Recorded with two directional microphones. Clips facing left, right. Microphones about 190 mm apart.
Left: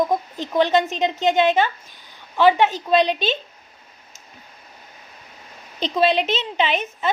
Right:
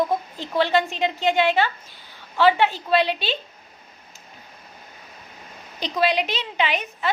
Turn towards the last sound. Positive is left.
turn(degrees=25)  # may be behind; listen again after turning